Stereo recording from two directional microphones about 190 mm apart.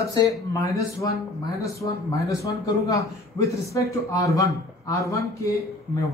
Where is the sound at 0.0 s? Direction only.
20° left (ahead or behind).